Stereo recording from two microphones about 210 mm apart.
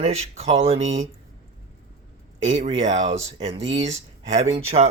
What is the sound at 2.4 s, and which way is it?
Speech, 30° right (ahead or behind).